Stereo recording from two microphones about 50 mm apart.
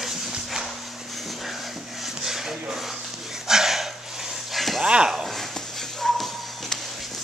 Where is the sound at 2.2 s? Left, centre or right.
Centre.